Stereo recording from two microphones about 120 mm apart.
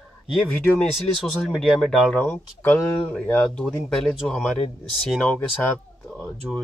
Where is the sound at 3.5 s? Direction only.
5° left (ahead or behind).